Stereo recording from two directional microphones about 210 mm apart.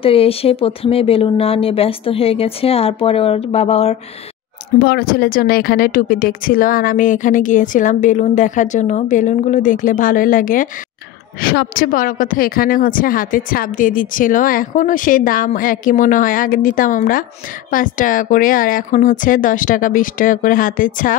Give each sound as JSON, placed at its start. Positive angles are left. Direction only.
{"t": 0.0, "sound": "speech", "side_deg": 25}
{"t": 4.7, "sound": "a woman's voice", "side_deg": 50}